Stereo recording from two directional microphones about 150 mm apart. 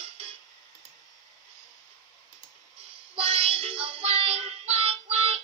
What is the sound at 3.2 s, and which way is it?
Music, 40° right (ahead or behind).